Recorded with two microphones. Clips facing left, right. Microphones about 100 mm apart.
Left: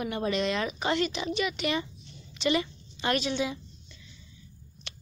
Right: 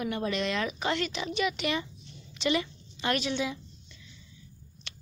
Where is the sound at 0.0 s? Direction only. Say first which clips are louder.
Left 2 dB; 20° left (ahead or behind).